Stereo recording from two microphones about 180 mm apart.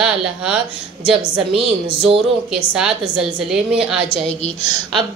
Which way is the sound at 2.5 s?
5° right (ahead or behind).